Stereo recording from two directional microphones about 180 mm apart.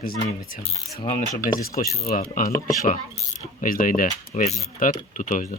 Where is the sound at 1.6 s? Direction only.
55° left (ahead or behind).